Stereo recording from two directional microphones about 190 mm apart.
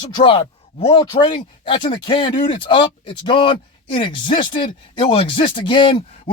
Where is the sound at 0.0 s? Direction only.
25° left (ahead or behind).